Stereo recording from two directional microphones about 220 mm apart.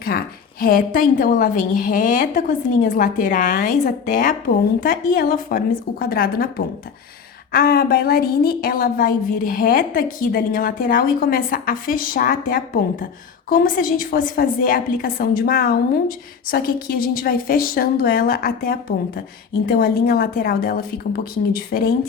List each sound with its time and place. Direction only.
0.6 s a woman's voice: 40° left (ahead or behind)
7.5 s a woman's voice: 40° left (ahead or behind)